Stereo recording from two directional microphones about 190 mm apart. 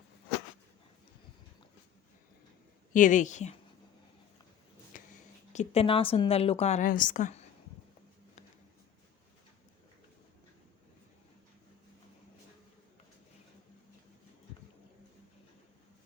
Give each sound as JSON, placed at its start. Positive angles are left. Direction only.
{"t": 2.9, "sound": "speech", "side_deg": 40}
{"t": 4.9, "sound": "speech", "side_deg": 40}